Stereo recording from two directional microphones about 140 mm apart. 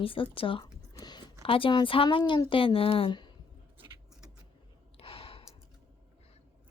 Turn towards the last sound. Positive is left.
turn(degrees=40)  # may be behind; listen again after turning